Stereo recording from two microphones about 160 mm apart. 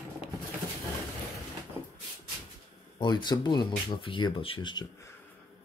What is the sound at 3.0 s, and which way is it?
Speech, 30° left (ahead or behind).